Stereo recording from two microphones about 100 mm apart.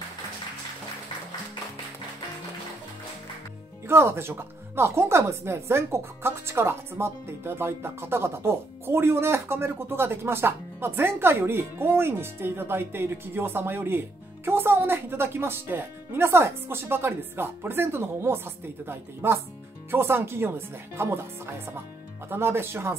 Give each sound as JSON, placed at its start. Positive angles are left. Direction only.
{"t": 3.8, "sound": "speech", "side_deg": -25}